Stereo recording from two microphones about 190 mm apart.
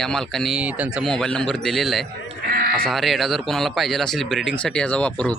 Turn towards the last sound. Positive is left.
turn(degrees=5)  # may be behind; listen again after turning